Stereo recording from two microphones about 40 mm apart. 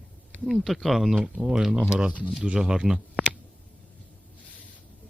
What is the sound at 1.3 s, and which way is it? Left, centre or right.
Speech, centre.